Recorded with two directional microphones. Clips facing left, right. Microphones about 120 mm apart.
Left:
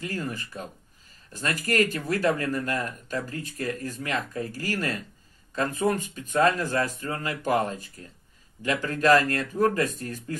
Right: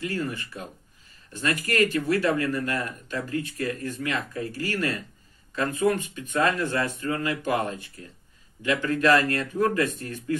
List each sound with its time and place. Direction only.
0.0 s speech: 40° left (ahead or behind)